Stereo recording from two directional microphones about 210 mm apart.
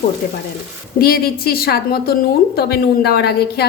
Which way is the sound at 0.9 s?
45° left (ahead or behind).